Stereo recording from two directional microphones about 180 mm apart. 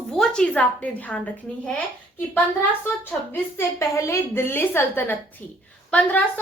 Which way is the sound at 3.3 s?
15° left (ahead or behind).